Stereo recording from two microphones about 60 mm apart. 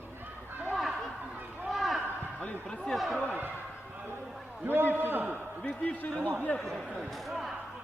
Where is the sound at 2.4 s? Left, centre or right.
Left.